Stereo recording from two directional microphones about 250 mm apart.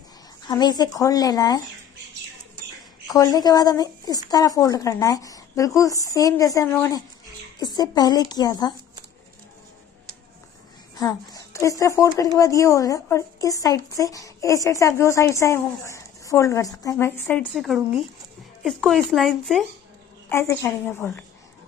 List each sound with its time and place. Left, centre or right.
0.5 s speech: centre
3.1 s speech: centre
11.0 s a sound: centre
11.8 s speech: centre